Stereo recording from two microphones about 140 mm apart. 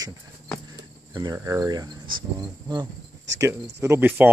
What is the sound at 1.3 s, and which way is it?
Speech, 25° right (ahead or behind).